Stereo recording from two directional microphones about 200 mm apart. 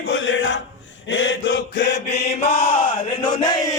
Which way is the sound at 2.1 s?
30° left (ahead or behind).